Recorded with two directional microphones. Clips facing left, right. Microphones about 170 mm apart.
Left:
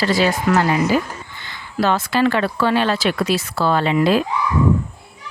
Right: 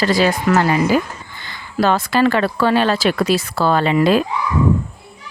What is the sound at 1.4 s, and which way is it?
Speech, 40° right (ahead or behind).